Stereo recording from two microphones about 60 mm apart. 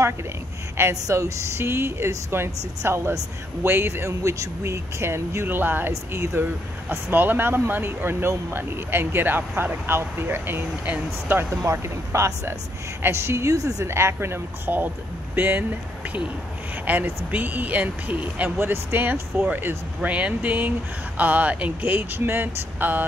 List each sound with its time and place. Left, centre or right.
1.0 s speech: right
4.2 s speech: right
5.9 s speech: right
11.5 s speech: right
13.5 s a woman's voice: right
13.8 s speech: right
14.7 s speech: right
16.9 s speech: right
18.6 s speech: right
20.0 s speech: right
22.2 s speech: right